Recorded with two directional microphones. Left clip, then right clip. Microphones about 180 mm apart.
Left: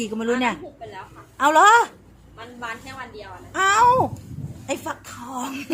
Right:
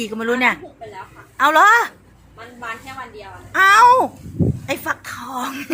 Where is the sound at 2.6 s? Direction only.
30° right (ahead or behind).